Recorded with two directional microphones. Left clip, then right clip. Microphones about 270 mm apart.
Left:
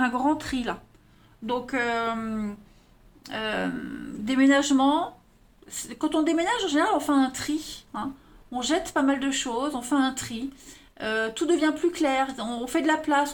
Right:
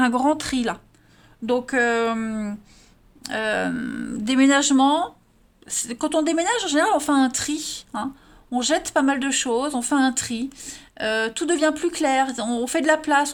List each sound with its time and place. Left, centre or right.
0.0 s speech: right